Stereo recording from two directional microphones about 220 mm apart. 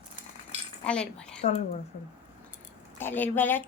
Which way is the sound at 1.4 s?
30° left (ahead or behind).